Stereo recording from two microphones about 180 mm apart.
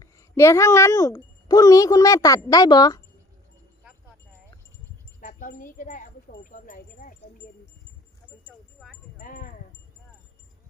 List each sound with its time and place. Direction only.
0.0 s speech: 15° left (ahead or behind)
5.2 s speech: 50° left (ahead or behind)
8.4 s speech: centre (ahead or behind)
9.2 s speech: 50° left (ahead or behind)